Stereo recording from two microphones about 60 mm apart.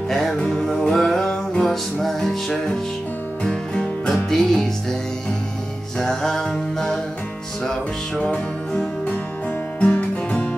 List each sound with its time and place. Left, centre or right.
0.4 s music: centre
1.7 s music: centre
3.4 s music: centre
4.1 s music: centre
5.9 s music: centre
8.2 s music: centre